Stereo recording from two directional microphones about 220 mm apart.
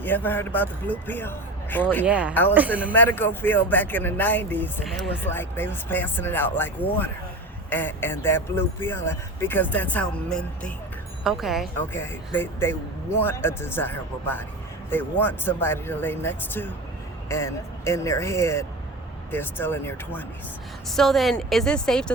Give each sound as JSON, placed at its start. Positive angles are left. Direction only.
{"t": 0.0, "sound": "speech", "side_deg": 10}
{"t": 2.0, "sound": "a woman's voice", "side_deg": -5}
{"t": 2.9, "sound": "speech", "side_deg": 10}
{"t": 7.7, "sound": "a woman's voice", "side_deg": 10}
{"t": 11.9, "sound": "a woman's voice", "side_deg": 10}